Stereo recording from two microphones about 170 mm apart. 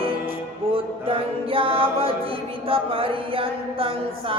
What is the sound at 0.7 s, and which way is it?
Music, 30° right (ahead or behind).